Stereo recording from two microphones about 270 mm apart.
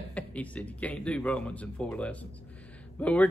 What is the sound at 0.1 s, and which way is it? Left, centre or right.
Speech, centre.